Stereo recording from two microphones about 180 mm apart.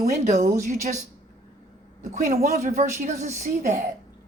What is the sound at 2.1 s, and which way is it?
A woman's voice, 40° right (ahead or behind).